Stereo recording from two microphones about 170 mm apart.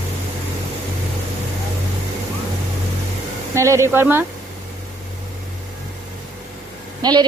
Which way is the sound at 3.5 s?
15° right (ahead or behind).